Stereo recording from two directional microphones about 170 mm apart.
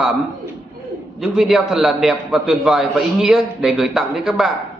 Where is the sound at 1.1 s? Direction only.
Centre (ahead or behind).